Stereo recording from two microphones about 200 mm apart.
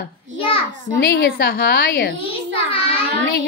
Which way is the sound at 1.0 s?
60° left (ahead or behind).